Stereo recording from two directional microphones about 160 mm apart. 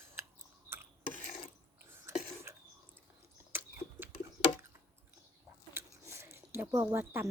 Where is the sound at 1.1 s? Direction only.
50° left (ahead or behind).